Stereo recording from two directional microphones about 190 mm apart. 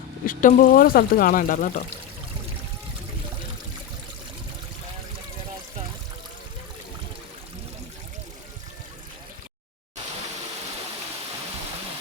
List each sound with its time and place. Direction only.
0.3 s speech: 45° left (ahead or behind)